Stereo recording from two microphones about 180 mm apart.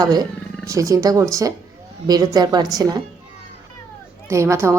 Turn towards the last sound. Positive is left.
turn(degrees=-15)  # may be behind; listen again after turning